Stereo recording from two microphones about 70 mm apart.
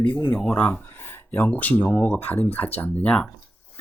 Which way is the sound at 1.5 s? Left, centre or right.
Left.